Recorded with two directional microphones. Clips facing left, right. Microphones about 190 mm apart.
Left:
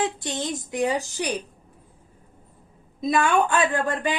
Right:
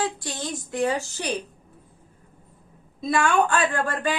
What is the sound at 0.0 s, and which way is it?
A woman's voice, 20° left (ahead or behind).